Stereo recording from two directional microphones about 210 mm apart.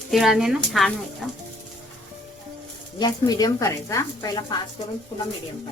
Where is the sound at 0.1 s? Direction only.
Centre (ahead or behind).